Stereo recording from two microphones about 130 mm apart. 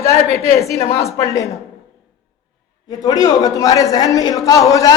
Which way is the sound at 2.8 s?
30° left (ahead or behind).